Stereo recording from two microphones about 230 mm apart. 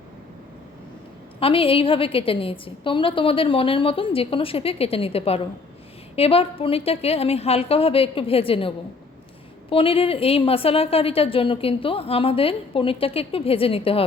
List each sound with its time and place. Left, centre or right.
1.4 s a woman's voice: left